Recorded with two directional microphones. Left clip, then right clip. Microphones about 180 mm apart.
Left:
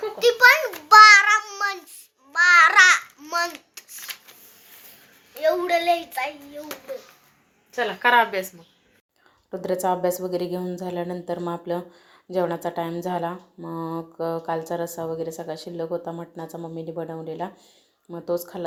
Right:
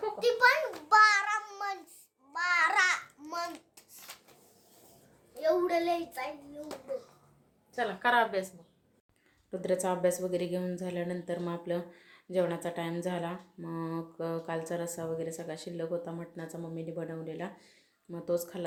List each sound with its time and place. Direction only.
0.2 s a sound: 20° left (ahead or behind)
0.9 s child singing: 5° left (ahead or behind)
2.3 s babbling: centre (ahead or behind)
5.3 s a sound: 5° left (ahead or behind)
8.0 s speech: 30° left (ahead or behind)
9.5 s speech: 15° left (ahead or behind)